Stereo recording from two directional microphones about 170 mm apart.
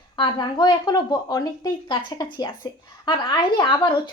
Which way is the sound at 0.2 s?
25° left (ahead or behind).